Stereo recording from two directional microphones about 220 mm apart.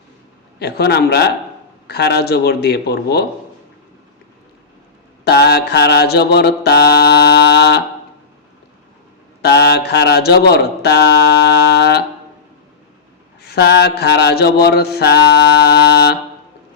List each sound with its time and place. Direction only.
0.6 s mantra: 45° left (ahead or behind)
5.2 s mantra: 45° left (ahead or behind)
9.4 s mantra: 45° left (ahead or behind)
13.4 s mantra: 50° left (ahead or behind)